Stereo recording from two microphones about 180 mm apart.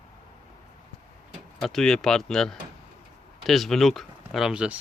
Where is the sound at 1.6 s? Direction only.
Centre (ahead or behind).